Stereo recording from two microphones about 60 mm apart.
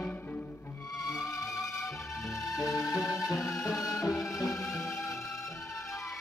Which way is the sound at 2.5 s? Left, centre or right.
Left.